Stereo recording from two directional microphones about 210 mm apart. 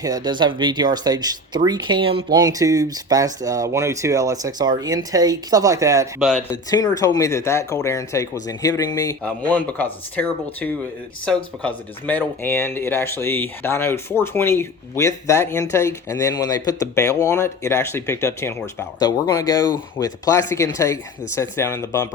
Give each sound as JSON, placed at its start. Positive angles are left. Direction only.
{"t": 0.0, "sound": "speech", "side_deg": -20}
{"t": 6.1, "sound": "speech", "side_deg": 0}
{"t": 6.5, "sound": "speech", "side_deg": 20}